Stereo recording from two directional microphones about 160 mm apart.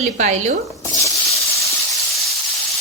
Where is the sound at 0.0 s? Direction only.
50° right (ahead or behind).